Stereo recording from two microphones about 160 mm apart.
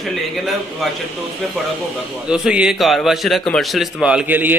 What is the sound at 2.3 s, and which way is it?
A man's voice, 5° right (ahead or behind).